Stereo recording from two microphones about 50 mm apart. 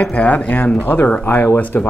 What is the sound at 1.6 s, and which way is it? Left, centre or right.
Speech, left.